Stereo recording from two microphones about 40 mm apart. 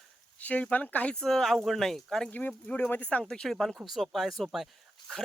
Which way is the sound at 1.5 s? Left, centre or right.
Centre.